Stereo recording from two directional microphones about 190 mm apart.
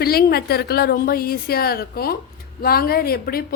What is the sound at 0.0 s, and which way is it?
A woman's voice, 55° left (ahead or behind).